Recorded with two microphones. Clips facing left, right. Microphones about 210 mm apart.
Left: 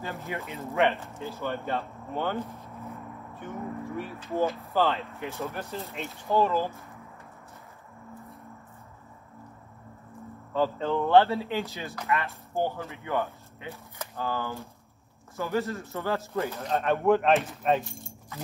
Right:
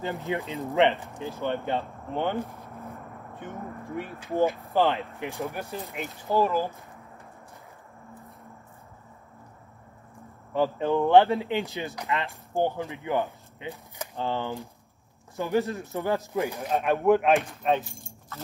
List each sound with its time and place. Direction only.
0.0 s speech: 15° right (ahead or behind)
3.9 s speech: 15° right (ahead or behind)
5.9 s speech: 5° right (ahead or behind)
6.3 s speech: 15° right (ahead or behind)
10.5 s speech: 15° right (ahead or behind)
14.1 s speech: 25° right (ahead or behind)
15.3 s speech: 15° right (ahead or behind); by 18.1 s centre (ahead or behind)